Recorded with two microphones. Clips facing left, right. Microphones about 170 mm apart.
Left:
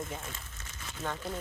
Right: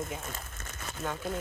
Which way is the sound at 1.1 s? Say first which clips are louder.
Right 3 dB; 50° right (ahead or behind).